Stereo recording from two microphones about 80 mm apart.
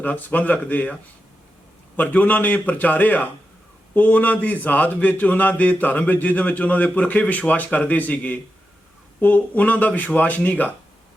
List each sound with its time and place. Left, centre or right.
0.0 s a man's voice: centre
2.0 s a man's voice: centre